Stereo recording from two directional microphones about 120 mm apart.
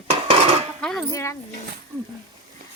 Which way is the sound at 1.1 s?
25° left (ahead or behind).